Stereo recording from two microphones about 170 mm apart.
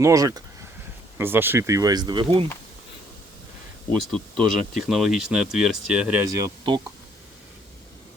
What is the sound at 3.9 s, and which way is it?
Speech, 5° left (ahead or behind).